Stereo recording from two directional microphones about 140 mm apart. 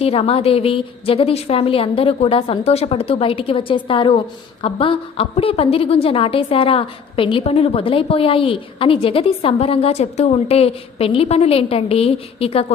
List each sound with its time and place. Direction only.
0.0 s a woman's voice: 45° left (ahead or behind)